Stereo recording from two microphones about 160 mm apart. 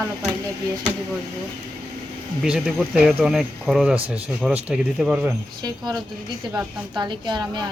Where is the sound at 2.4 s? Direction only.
5° right (ahead or behind).